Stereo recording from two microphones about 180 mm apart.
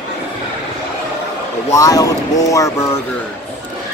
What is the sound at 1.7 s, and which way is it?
Speech, 20° left (ahead or behind).